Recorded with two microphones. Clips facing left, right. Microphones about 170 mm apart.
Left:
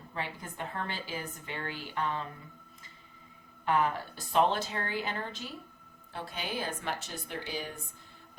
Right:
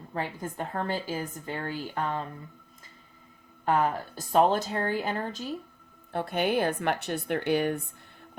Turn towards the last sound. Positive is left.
turn(degrees=-60)  # may be behind; listen again after turning